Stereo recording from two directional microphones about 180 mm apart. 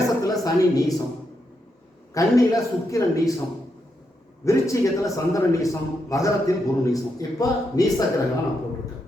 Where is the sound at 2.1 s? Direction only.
20° left (ahead or behind).